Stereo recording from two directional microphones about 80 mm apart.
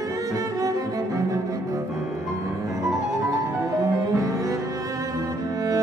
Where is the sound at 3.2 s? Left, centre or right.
Right.